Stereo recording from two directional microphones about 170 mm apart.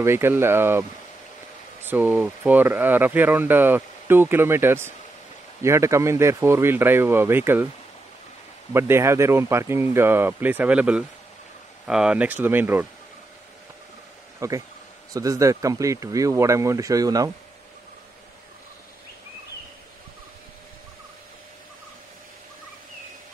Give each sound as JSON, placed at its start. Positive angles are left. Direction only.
{"t": 0.0, "sound": "speech", "side_deg": -15}
{"t": 1.9, "sound": "speech", "side_deg": -10}
{"t": 8.7, "sound": "speech", "side_deg": -15}
{"t": 14.4, "sound": "speech", "side_deg": -20}